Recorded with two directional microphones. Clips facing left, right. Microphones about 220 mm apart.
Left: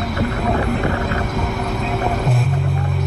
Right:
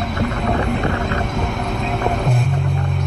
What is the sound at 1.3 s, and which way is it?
Vehicle, 5° left (ahead or behind).